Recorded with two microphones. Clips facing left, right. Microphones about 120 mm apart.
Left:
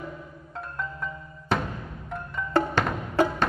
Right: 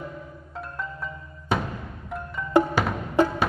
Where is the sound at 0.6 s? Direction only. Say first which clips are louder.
Even; centre (ahead or behind).